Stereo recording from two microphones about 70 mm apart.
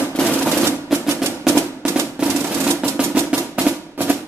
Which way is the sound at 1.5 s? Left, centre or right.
Right.